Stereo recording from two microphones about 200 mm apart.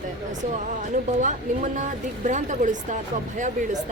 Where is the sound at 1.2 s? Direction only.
40° right (ahead or behind).